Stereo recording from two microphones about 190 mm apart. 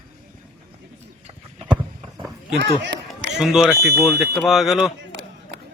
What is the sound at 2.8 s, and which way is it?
Run, 70° right (ahead or behind).